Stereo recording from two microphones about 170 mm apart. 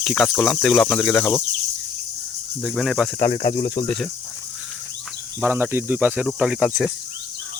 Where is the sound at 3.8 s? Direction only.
Centre (ahead or behind).